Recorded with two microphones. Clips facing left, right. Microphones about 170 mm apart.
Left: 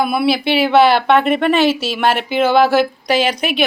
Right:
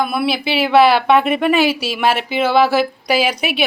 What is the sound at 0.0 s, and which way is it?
Speech, centre (ahead or behind).